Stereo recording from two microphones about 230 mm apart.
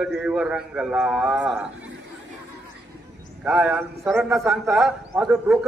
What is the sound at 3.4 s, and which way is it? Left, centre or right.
A man's voice, centre.